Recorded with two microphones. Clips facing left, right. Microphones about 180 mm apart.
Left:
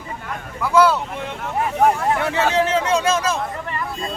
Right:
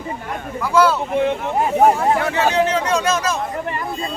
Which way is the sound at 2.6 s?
25° left (ahead or behind).